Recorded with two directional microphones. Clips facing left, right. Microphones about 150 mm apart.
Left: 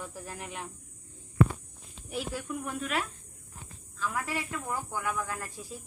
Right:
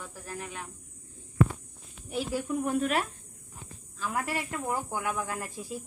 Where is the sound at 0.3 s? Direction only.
20° left (ahead or behind).